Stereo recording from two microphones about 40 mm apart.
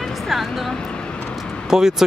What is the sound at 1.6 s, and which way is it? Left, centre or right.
Speech, centre.